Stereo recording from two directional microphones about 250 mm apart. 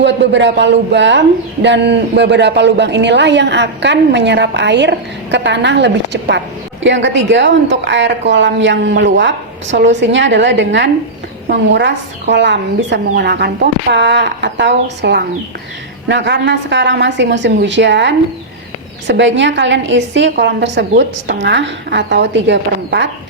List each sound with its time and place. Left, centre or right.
0.0 s speech: right